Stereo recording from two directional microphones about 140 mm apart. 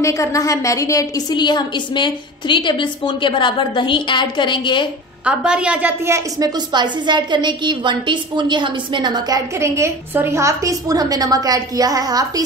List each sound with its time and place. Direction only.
0.0 s a woman's voice: 20° left (ahead or behind)
5.2 s a woman's voice: 5° right (ahead or behind); by 12.3 s 25° right (ahead or behind)